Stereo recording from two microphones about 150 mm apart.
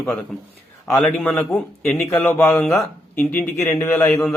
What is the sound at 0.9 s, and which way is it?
A man's voice, 10° left (ahead or behind).